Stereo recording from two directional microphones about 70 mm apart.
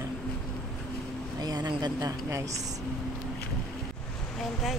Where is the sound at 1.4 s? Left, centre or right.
Right.